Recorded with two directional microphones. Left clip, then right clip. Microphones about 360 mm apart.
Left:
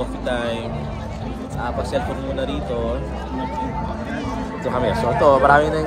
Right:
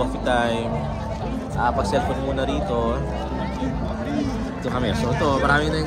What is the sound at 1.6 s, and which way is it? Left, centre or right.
Speech, centre.